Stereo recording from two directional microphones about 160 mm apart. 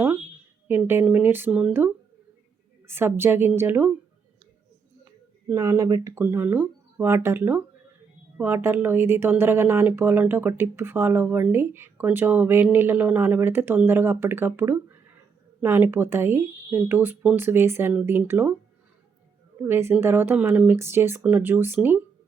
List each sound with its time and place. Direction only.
0.7 s speech: 15° right (ahead or behind)
5.5 s speech: 20° right (ahead or behind)
19.6 s speech: 15° right (ahead or behind)